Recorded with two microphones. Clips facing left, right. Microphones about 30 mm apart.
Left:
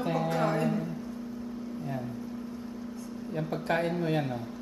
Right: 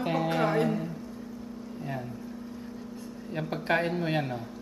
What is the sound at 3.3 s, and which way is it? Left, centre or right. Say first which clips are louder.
Speech: right 2 dB; right.